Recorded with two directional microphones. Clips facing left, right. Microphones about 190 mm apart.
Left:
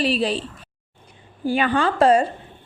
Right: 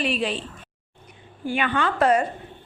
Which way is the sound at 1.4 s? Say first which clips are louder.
Left 4 dB; 35° left (ahead or behind).